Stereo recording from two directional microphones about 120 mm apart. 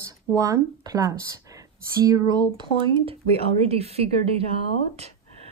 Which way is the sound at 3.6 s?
55° right (ahead or behind).